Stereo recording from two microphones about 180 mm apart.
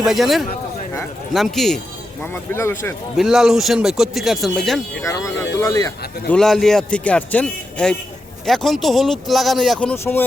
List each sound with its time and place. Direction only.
0.0 s a man's voice: centre (ahead or behind)
2.2 s speech: 10° left (ahead or behind)
3.2 s a man's voice: centre (ahead or behind)
5.0 s speech: 15° left (ahead or behind)
6.2 s a man's voice: 5° left (ahead or behind)
9.9 s speech: 15° left (ahead or behind)